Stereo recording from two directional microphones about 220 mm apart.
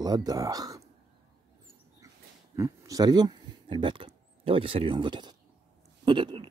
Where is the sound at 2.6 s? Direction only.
15° right (ahead or behind).